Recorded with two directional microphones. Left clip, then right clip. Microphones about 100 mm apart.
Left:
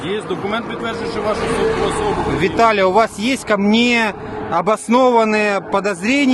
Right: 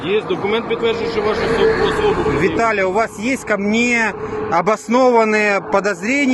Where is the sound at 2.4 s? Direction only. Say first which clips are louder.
Left 2 dB; 35° left (ahead or behind).